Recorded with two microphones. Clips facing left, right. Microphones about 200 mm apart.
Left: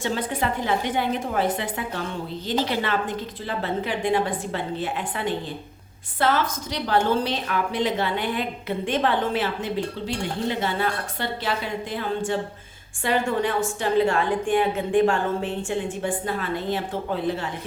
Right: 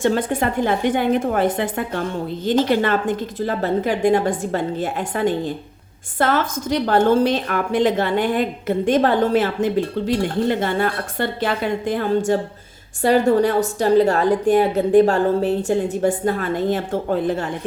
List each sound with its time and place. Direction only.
0.0 s a woman's voice: 50° right (ahead or behind)